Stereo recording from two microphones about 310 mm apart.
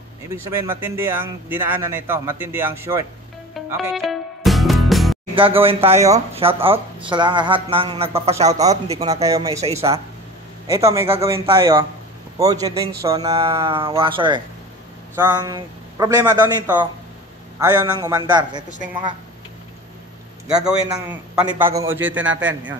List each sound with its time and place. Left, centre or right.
0.5 s speech: centre
3.5 s music: centre
5.3 s speech: centre
20.4 s a man's voice: centre